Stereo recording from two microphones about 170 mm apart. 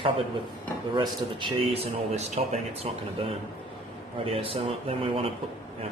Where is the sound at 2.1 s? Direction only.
40° right (ahead or behind).